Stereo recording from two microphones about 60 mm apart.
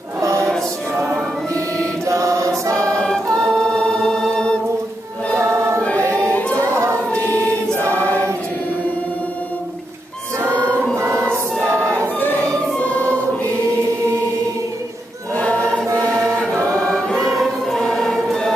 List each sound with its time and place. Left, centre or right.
0.2 s music: right
2.0 s choir: right
3.3 s choir: centre
6.5 s choir: right
7.1 s choir: left
10.4 s choir: right
15.3 s choir: left; by 18.5 s centre